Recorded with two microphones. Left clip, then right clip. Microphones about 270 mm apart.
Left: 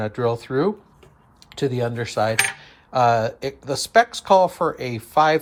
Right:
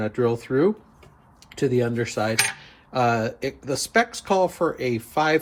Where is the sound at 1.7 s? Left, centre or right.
Left.